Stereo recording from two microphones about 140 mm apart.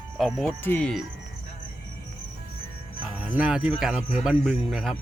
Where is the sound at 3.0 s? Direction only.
10° right (ahead or behind).